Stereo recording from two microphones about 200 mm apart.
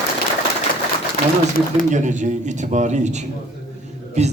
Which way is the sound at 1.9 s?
35° right (ahead or behind).